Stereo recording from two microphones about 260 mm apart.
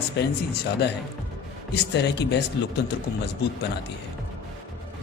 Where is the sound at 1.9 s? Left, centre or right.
Left.